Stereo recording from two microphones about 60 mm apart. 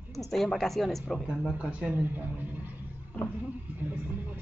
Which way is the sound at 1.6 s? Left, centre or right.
Right.